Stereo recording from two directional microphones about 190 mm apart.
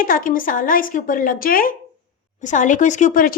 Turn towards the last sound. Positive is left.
turn(degrees=45)  # may be behind; listen again after turning